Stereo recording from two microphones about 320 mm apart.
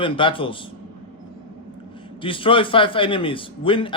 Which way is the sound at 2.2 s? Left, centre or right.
Centre.